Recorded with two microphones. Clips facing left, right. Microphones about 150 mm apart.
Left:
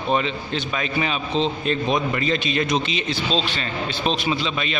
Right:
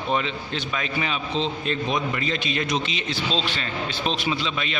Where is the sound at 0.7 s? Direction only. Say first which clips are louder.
Left 3 dB; 25° left (ahead or behind).